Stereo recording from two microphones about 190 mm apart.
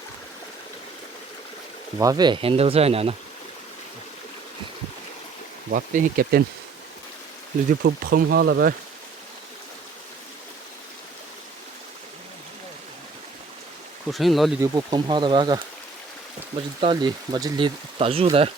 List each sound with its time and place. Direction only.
2.0 s speech: 20° right (ahead or behind)
5.7 s speech: 45° right (ahead or behind)
7.7 s speech: 55° right (ahead or behind)
14.1 s speech: centre (ahead or behind)
14.6 s speech: 20° right (ahead or behind)
16.8 s speech: 25° right (ahead or behind)